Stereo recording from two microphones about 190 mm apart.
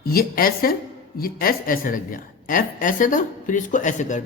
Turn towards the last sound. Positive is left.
turn(degrees=40)  # may be behind; listen again after turning